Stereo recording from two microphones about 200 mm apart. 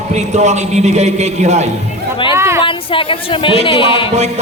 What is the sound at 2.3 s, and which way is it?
Speech, 15° right (ahead or behind).